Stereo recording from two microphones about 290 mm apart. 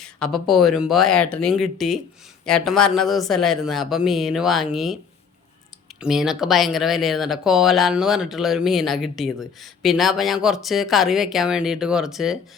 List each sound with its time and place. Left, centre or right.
0.0 s speech: centre
6.0 s speech: centre